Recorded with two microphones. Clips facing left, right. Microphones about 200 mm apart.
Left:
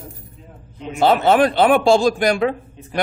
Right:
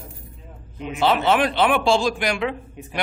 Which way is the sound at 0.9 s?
45° left (ahead or behind).